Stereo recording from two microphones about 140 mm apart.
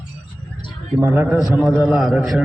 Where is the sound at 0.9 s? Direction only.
15° right (ahead or behind).